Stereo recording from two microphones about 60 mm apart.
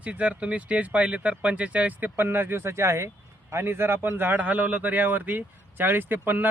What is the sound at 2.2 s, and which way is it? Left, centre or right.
Speech, right.